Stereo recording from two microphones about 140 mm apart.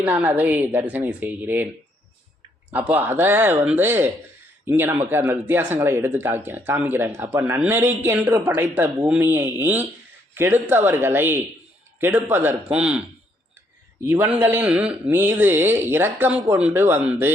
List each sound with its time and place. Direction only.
0.0 s speech: 10° right (ahead or behind)
2.9 s speech: 15° right (ahead or behind)
14.0 s speech: 15° right (ahead or behind)